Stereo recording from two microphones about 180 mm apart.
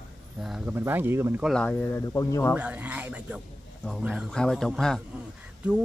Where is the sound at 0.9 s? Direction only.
10° right (ahead or behind).